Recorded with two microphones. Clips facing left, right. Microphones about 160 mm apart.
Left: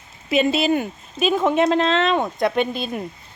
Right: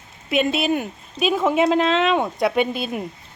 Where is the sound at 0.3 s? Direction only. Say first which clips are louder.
Left 2 dB; centre (ahead or behind).